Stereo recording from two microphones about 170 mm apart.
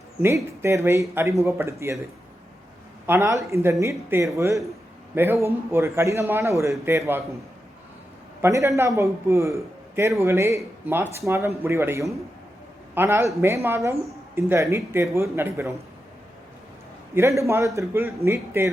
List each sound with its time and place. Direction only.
0.2 s a man's voice: 15° right (ahead or behind)
3.1 s a man's voice: 15° right (ahead or behind)
8.4 s a man's voice: 15° right (ahead or behind)
17.2 s a man's voice: 15° right (ahead or behind)